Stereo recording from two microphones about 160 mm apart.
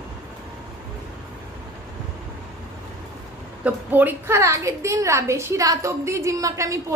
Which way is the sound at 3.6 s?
10° right (ahead or behind).